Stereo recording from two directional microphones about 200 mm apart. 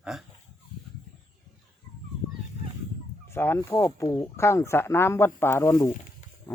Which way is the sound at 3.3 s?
10° left (ahead or behind).